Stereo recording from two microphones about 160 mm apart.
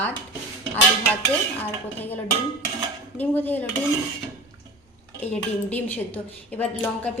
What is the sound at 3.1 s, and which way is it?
Speech, 10° left (ahead or behind).